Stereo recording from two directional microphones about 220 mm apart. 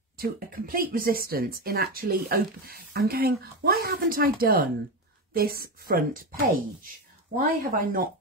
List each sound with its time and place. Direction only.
0.2 s a woman's voice: 40° right (ahead or behind)
7.3 s a woman's voice: 40° right (ahead or behind)